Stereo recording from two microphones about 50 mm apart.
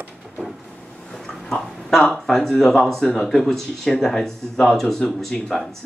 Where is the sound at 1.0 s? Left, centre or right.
Centre.